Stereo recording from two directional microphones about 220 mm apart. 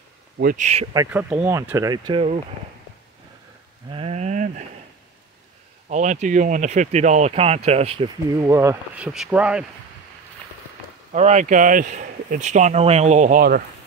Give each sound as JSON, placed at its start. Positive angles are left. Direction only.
{"t": 0.4, "sound": "speech", "side_deg": -35}
{"t": 0.9, "sound": "speech", "side_deg": -10}
{"t": 3.9, "sound": "speech", "side_deg": -30}
{"t": 5.9, "sound": "speech", "side_deg": -35}
{"t": 8.4, "sound": "speech", "side_deg": -15}
{"t": 11.1, "sound": "speech", "side_deg": -30}